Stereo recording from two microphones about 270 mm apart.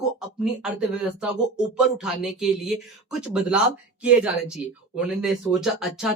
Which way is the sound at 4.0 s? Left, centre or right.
Centre.